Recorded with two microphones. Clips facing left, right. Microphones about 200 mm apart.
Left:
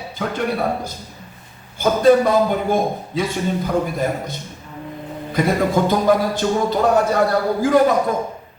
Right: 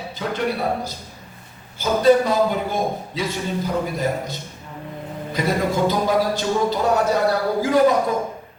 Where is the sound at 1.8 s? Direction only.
55° left (ahead or behind).